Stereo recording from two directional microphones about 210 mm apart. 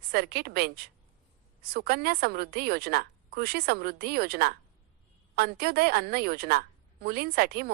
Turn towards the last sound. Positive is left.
turn(degrees=-45)  # may be behind; listen again after turning